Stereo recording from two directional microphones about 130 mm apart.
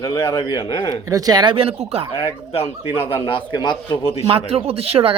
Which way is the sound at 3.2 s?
40° left (ahead or behind).